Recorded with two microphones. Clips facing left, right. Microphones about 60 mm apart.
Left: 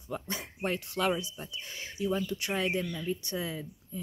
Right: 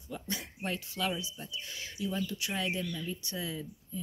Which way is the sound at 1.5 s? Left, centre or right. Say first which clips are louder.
Left 3 dB; left.